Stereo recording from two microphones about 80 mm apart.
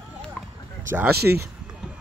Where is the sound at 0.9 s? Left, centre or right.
Right.